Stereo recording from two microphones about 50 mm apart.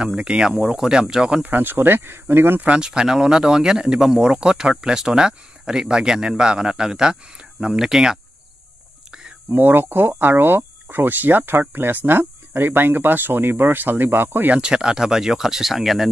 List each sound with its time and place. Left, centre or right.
0.0 s speech: centre
1.4 s speech: right
2.6 s speech: centre
9.5 s speech: right
14.6 s speech: centre